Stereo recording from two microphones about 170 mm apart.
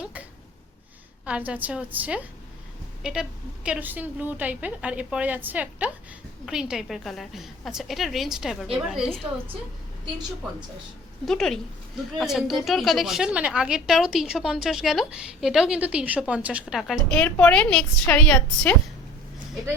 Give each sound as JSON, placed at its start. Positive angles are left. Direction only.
{"t": 0.0, "sound": "a sound", "side_deg": -10}
{"t": 1.2, "sound": "a woman's voice", "side_deg": -10}
{"t": 11.3, "sound": "a woman's voice", "side_deg": 0}